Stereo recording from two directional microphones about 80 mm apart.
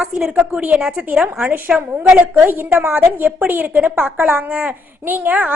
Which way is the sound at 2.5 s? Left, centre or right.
Right.